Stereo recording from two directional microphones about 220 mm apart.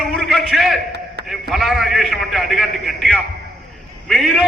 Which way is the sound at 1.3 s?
Centre (ahead or behind).